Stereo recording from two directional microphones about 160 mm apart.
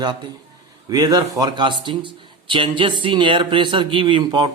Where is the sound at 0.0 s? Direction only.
30° right (ahead or behind).